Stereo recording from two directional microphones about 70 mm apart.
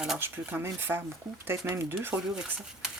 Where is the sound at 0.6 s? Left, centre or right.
Right.